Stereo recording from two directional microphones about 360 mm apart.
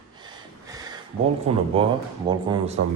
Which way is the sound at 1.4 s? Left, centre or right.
Centre.